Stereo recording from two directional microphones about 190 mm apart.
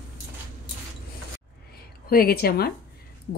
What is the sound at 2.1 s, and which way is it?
Speech, 50° left (ahead or behind).